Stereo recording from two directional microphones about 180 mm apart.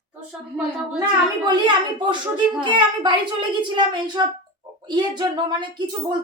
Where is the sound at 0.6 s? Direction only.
Centre (ahead or behind).